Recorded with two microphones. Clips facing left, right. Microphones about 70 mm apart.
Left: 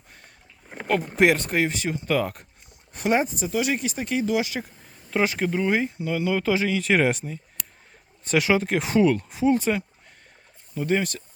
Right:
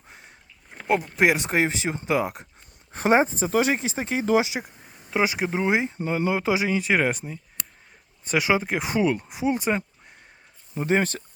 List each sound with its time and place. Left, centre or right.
1.4 s speech: right
2.0 s speech: centre
2.9 s speech: right; by 5.5 s centre
5.5 s speech: right
6.0 s speech: right
6.3 s speech: centre
6.7 s speech: centre
8.3 s speech: centre
10.8 s speech: right